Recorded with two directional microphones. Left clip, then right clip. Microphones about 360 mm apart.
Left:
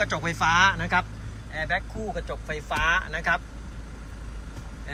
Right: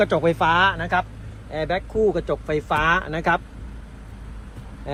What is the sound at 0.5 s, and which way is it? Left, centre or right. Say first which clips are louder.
Speech: right 2 dB; centre.